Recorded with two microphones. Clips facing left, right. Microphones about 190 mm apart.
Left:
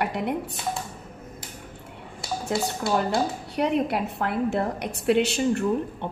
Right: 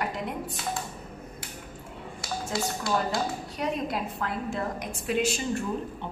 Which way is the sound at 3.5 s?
65° left (ahead or behind).